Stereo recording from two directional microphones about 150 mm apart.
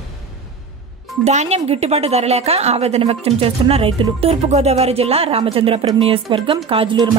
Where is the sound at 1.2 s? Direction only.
45° right (ahead or behind).